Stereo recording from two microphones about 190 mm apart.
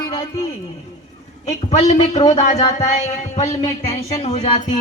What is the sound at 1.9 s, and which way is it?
Speech, 35° left (ahead or behind).